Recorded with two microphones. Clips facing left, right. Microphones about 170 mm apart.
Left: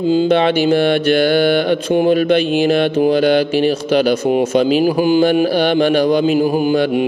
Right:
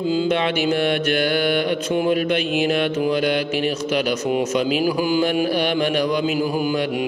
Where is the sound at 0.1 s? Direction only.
30° left (ahead or behind).